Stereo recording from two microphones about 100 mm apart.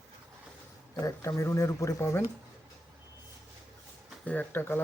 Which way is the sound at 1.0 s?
35° left (ahead or behind).